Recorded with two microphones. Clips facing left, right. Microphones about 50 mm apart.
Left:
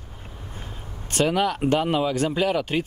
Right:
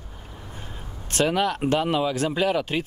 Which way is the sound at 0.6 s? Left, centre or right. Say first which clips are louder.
Even; centre.